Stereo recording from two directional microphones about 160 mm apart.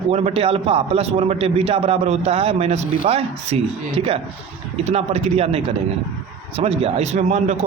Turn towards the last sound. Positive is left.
turn(degrees=-45)  # may be behind; listen again after turning